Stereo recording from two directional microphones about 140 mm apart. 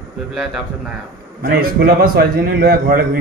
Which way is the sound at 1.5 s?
90° right.